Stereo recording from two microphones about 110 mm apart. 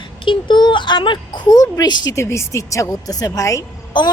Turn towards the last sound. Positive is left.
turn(degrees=45)  # may be behind; listen again after turning